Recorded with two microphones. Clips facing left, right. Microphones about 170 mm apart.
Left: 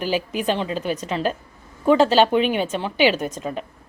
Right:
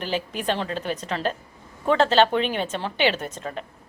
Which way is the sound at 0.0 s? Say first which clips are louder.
Left 4 dB; 5° left (ahead or behind).